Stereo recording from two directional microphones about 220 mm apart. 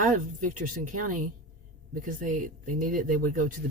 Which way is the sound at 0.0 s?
35° right (ahead or behind).